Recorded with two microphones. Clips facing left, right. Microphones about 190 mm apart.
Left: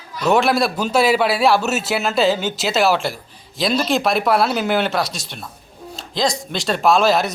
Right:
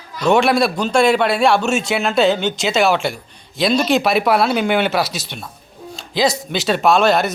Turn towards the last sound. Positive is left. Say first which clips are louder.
# right 1 dB
turn(degrees=0)  # may be behind; listen again after turning